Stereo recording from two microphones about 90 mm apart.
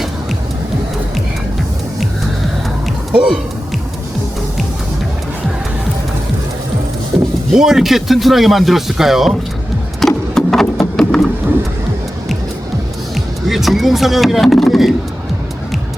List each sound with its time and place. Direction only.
3.1 s speech: 10° right (ahead or behind)
7.5 s speech: 5° right (ahead or behind)
10.0 s a sound: 5° left (ahead or behind)
13.5 s speech: centre (ahead or behind)